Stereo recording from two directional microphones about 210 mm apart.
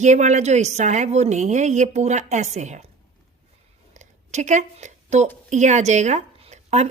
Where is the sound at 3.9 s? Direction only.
35° right (ahead or behind).